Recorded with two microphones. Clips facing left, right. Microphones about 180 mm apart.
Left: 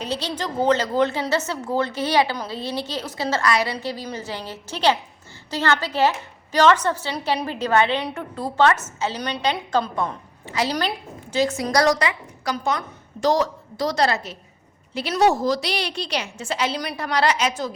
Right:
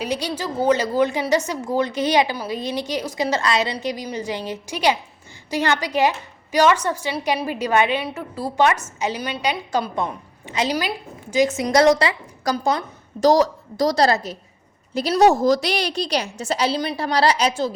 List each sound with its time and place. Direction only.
0.0 s a woman's voice: 10° right (ahead or behind); by 17.7 s 30° right (ahead or behind)